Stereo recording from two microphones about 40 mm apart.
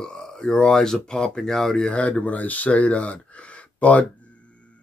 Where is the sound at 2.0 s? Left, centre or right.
Left.